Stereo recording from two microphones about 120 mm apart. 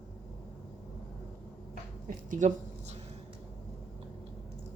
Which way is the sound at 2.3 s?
85° right.